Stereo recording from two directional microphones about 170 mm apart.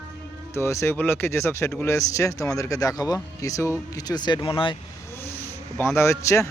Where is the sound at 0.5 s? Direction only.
15° left (ahead or behind).